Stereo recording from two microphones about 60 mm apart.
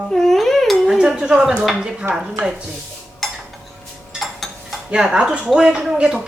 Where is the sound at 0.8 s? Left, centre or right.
Centre.